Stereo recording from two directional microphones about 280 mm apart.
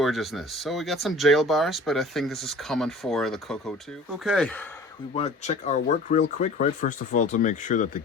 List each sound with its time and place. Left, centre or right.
0.0 s speech: centre
5.1 s speech: left